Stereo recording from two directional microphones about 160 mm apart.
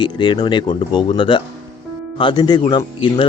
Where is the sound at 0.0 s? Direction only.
30° left (ahead or behind).